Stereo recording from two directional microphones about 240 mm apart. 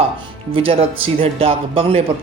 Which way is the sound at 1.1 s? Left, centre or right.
Right.